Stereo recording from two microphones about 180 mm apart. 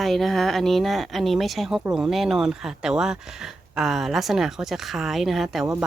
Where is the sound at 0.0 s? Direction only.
Centre (ahead or behind).